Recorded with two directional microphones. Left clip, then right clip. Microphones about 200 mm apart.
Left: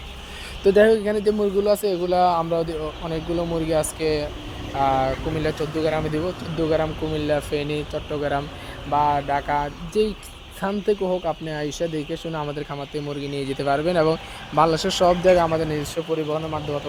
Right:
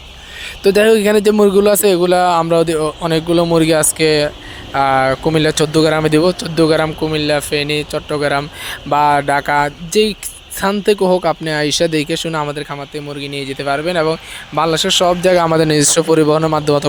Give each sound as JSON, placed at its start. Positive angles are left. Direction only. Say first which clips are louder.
{"t": 0.6, "sound": "speech", "louder": "right 6 dB", "side_deg": -20}
{"t": 12.5, "sound": "speech", "louder": "right 5 dB", "side_deg": -10}
{"t": 15.2, "sound": "speech", "louder": "right 6 dB", "side_deg": -20}